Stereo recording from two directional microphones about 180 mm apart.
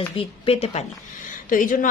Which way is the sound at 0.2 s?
30° left (ahead or behind).